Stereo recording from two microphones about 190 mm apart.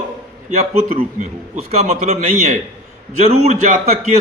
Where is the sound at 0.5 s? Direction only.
35° right (ahead or behind).